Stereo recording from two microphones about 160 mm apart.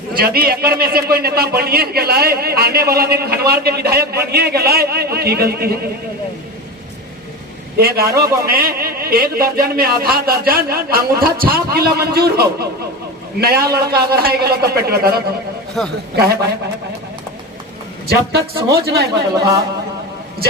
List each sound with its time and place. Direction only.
0.2 s a man's voice: 75° right (ahead or behind)
7.8 s a man's voice: 70° right (ahead or behind)
15.8 s a man's voice: centre (ahead or behind)
18.1 s speech: 85° right